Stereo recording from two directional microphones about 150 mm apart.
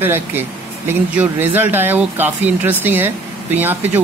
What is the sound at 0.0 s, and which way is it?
Speech, 15° right (ahead or behind).